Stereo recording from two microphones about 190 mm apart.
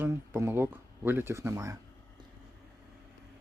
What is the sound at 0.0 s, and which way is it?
Speech, 10° right (ahead or behind).